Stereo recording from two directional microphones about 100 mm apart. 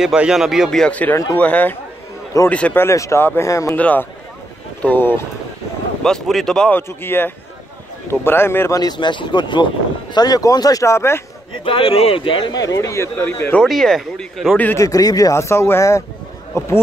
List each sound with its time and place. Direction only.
0.0 s speech: 5° right (ahead or behind); by 2.8 s 15° left (ahead or behind)
2.8 s speech: 30° left (ahead or behind)
3.7 s speech: 15° left (ahead or behind)
6.0 s speech: 5° left (ahead or behind)
6.7 s speech: 20° left (ahead or behind)
8.7 s speech: 45° left (ahead or behind); by 11.2 s 25° left (ahead or behind)
11.6 s speech: 65° left (ahead or behind)
12.5 s speech: 35° left (ahead or behind); by 13.7 s 15° left (ahead or behind)
13.7 s speech: centre (ahead or behind)
14.8 s a man's voice: 35° left (ahead or behind)